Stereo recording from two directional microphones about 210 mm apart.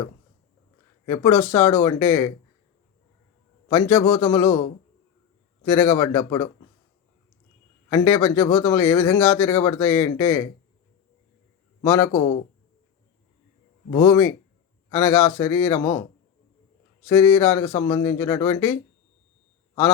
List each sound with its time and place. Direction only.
1.0 s speech: 15° left (ahead or behind)
3.7 s speech: 15° left (ahead or behind)
5.6 s speech: 15° left (ahead or behind)
7.9 s speech: 10° left (ahead or behind)
11.8 s speech: 15° left (ahead or behind)
13.9 s speech: 15° left (ahead or behind)
17.1 s speech: 15° left (ahead or behind)